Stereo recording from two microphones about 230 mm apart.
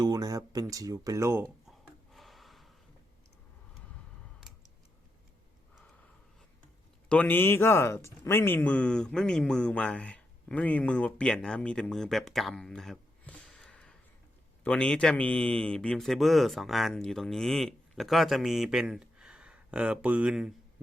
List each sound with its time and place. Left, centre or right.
0.0 s speech: centre
2.1 s a sound: centre
7.1 s speech: centre